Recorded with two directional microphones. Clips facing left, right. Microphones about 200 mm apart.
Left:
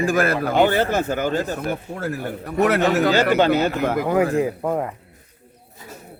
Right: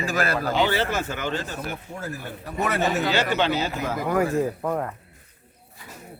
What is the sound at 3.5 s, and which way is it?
Speech, 60° left (ahead or behind).